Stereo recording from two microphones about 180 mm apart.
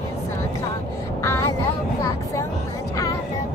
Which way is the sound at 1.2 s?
15° left (ahead or behind).